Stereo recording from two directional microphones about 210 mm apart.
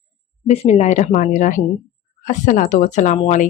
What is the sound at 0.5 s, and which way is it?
Speech, 30° left (ahead or behind).